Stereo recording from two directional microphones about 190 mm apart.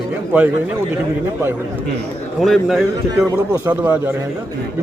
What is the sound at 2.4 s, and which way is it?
A man's voice, centre (ahead or behind).